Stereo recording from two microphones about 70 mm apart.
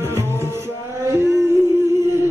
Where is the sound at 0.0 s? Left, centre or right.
Right.